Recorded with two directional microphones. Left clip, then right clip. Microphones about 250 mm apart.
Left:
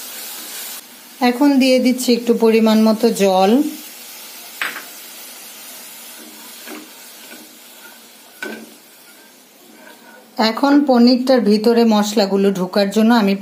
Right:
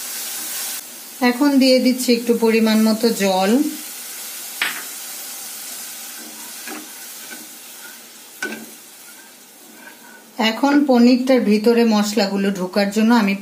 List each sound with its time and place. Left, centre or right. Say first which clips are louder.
1.2 s a woman's voice: left 1 dB; left
10.3 s a woman's voice: left 2 dB; left